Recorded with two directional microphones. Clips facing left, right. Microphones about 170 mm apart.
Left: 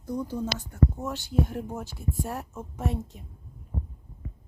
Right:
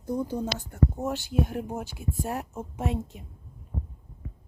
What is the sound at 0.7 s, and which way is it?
Speech, 25° right (ahead or behind).